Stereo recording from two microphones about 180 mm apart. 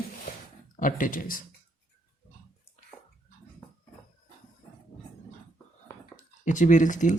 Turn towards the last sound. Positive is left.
turn(degrees=45)  # may be behind; listen again after turning